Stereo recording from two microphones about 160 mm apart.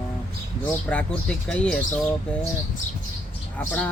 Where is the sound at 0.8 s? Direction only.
5° left (ahead or behind).